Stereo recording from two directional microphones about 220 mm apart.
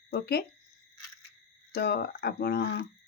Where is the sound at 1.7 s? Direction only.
45° left (ahead or behind).